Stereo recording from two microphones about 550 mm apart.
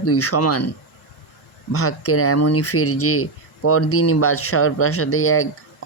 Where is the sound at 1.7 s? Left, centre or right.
Left.